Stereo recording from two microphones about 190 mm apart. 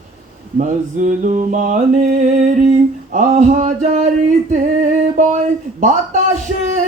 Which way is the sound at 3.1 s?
40° right (ahead or behind).